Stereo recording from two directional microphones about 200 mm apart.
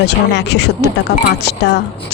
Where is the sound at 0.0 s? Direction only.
60° left (ahead or behind).